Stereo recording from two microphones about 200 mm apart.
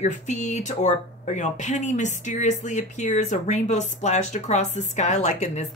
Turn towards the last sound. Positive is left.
turn(degrees=35)  # may be behind; listen again after turning